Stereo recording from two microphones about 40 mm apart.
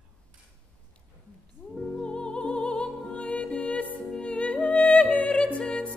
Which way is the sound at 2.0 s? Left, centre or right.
Left.